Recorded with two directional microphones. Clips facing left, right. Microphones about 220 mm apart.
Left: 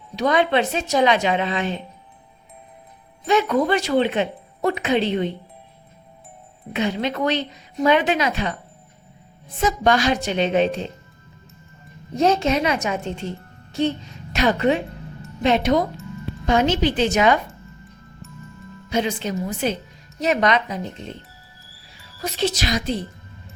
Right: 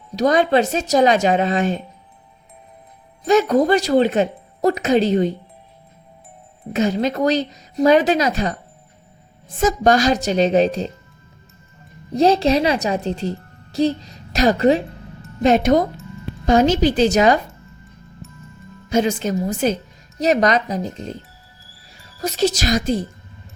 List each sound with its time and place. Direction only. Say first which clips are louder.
0.2 s speech: right 3 dB; 40° right (ahead or behind)
3.2 s a woman's voice: right 4 dB; 40° right (ahead or behind)
6.7 s a woman's voice: right 4 dB; 40° right (ahead or behind)
9.6 s a woman's voice: right 4 dB; 45° right (ahead or behind)
12.1 s a woman's voice: right 4 dB; 35° right (ahead or behind)
18.9 s a woman's voice: right 5 dB; 45° right (ahead or behind)
22.2 s speech: right 4 dB; 40° right (ahead or behind)